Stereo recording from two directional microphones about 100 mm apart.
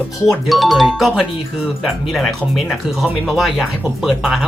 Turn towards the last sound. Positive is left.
turn(degrees=-5)  # may be behind; listen again after turning